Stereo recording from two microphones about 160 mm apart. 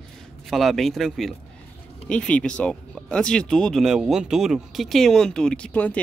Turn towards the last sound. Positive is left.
turn(degrees=10)  # may be behind; listen again after turning